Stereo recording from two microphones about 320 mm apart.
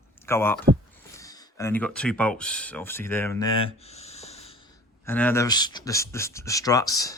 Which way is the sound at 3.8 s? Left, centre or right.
Centre.